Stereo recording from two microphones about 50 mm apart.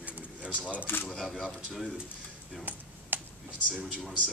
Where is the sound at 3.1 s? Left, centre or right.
Right.